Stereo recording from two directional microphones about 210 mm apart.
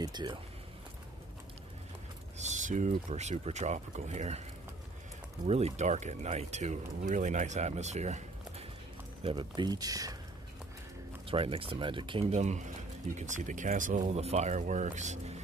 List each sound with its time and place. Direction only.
0.0 s speech: 20° right (ahead or behind)
2.3 s speech: 35° right (ahead or behind)
5.5 s speech: 30° right (ahead or behind)
11.2 s speech: 25° right (ahead or behind)